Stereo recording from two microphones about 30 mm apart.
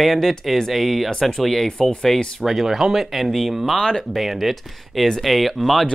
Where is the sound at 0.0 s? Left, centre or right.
Centre.